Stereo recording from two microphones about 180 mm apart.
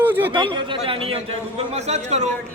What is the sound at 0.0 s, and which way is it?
Chatter, 10° right (ahead or behind).